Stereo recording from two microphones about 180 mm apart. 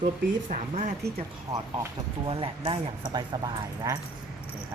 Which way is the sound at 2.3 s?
30° right (ahead or behind).